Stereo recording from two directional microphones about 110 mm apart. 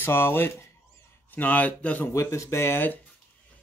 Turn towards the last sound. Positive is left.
turn(degrees=20)  # may be behind; listen again after turning